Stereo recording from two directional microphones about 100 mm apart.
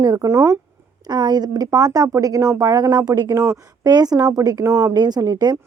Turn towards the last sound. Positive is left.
turn(degrees=-40)  # may be behind; listen again after turning